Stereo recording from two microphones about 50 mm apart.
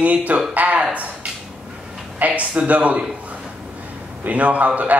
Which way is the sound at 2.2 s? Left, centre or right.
Right.